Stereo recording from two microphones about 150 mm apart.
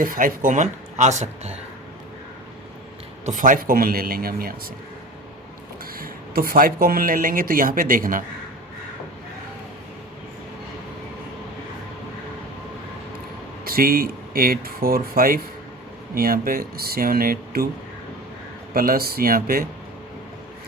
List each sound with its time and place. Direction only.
0.0 s speech: 70° right (ahead or behind); by 1.5 s 50° right (ahead or behind)
3.2 s speech: 60° right (ahead or behind); by 4.5 s 85° right
6.0 s speech: 80° right
13.7 s speech: 80° right
18.7 s speech: 80° right